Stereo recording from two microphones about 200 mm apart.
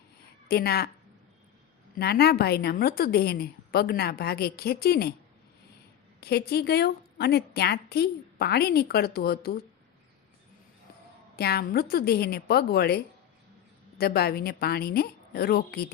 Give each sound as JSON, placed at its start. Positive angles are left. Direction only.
{"t": 0.4, "sound": "a woman's voice", "side_deg": 50}
{"t": 2.0, "sound": "a woman's voice", "side_deg": 55}
{"t": 6.1, "sound": "a woman's voice", "side_deg": 55}
{"t": 11.3, "sound": "a woman's voice", "side_deg": 50}
{"t": 14.0, "sound": "a woman's voice", "side_deg": 50}